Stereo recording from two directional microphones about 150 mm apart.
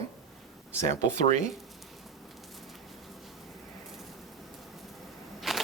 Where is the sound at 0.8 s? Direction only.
50° right (ahead or behind).